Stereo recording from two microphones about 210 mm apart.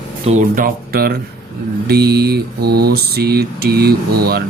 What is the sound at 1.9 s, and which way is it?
Mantra, 50° right (ahead or behind).